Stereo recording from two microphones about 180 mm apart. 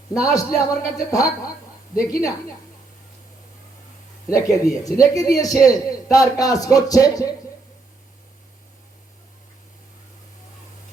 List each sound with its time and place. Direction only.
0.1 s a man's voice: 20° left (ahead or behind)
4.3 s a man's voice: 20° left (ahead or behind)